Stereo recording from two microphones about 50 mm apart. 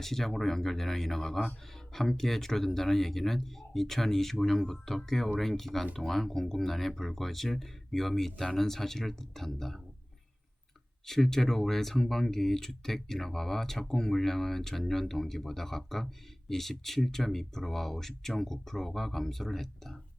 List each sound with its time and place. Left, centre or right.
0.0 s speech: centre
11.0 s speech: centre